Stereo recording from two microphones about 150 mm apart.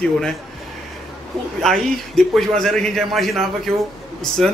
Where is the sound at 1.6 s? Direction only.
5° left (ahead or behind).